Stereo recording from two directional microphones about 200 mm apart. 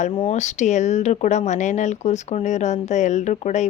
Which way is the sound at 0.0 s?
35° left (ahead or behind).